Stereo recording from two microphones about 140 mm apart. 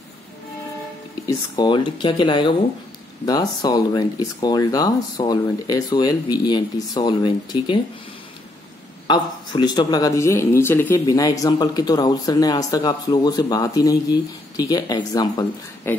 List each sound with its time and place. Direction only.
1.2 s speech: 35° left (ahead or behind)
9.0 s speech: 30° left (ahead or behind); by 11.1 s 15° left (ahead or behind)
11.1 s speech: 25° left (ahead or behind)